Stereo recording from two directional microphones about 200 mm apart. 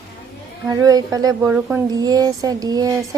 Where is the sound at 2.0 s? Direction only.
20° right (ahead or behind).